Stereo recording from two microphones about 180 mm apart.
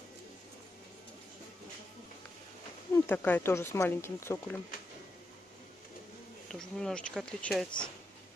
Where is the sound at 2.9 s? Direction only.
10° left (ahead or behind).